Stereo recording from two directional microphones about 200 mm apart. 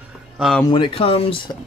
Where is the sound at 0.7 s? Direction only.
25° left (ahead or behind).